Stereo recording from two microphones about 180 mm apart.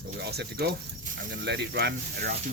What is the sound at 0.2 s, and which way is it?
Speech, 65° right (ahead or behind).